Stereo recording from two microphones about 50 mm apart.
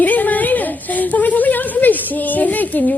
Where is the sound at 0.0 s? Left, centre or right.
Left.